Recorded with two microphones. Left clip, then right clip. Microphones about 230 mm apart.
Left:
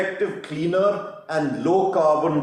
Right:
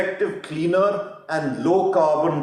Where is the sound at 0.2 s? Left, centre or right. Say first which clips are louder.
Right 1 dB; right.